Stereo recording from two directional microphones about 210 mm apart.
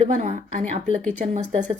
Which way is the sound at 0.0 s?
35° right (ahead or behind).